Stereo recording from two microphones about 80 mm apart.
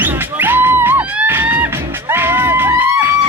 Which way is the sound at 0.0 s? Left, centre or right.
Right.